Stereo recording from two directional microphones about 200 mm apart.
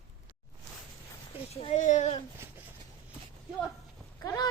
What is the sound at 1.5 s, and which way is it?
Speech, 30° left (ahead or behind).